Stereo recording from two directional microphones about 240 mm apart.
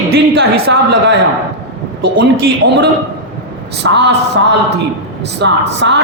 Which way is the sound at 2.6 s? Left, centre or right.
Right.